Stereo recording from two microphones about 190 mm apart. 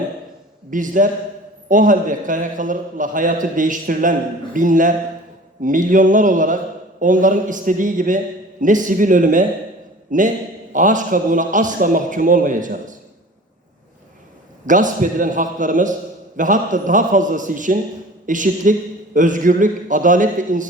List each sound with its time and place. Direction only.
0.7 s a man's voice: 45° right (ahead or behind)
14.7 s a man's voice: 45° right (ahead or behind)